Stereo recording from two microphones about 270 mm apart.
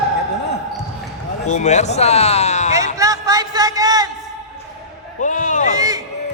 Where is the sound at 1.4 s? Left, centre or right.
Left.